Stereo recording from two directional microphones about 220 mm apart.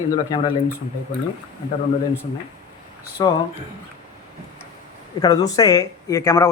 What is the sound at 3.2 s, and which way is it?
Speech, 15° left (ahead or behind).